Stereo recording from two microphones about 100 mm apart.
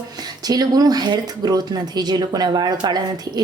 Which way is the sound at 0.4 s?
40° right (ahead or behind).